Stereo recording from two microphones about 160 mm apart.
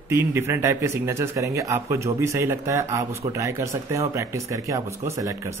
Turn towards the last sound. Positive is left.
turn(degrees=-20)  # may be behind; listen again after turning